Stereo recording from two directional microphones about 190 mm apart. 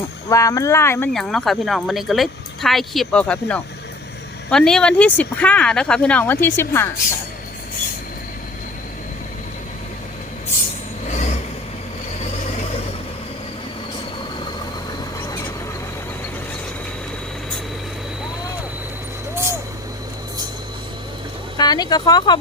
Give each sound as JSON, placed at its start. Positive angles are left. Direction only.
{"t": 0.3, "sound": "speech", "side_deg": 15}
{"t": 1.1, "sound": "speech", "side_deg": 5}
{"t": 11.1, "sound": "vehicle", "side_deg": 40}
{"t": 21.6, "sound": "speech", "side_deg": 20}